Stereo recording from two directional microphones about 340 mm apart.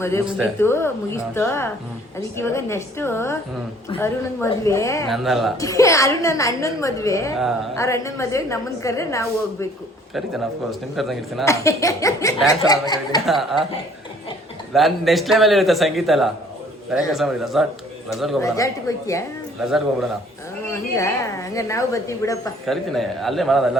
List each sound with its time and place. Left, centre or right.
0.0 s speech: centre
13.2 s speech: centre
14.7 s speech: centre